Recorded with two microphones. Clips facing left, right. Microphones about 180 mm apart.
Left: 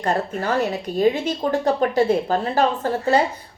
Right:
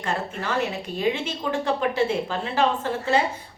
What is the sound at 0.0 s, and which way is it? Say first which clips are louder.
Speech: left 6 dB; 40° left (ahead or behind).